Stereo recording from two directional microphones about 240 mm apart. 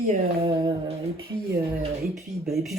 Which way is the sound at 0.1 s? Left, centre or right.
Right.